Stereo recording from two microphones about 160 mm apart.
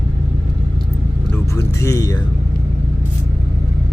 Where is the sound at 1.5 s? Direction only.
20° left (ahead or behind).